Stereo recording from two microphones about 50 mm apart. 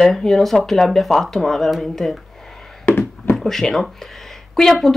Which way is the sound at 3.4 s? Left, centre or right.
Centre.